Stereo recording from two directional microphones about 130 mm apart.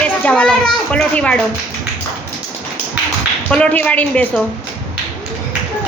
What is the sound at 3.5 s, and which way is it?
Speech, 10° left (ahead or behind).